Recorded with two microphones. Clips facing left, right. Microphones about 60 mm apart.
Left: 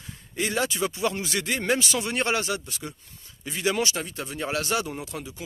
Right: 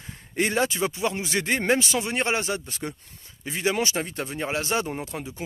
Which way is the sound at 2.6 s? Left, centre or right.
Right.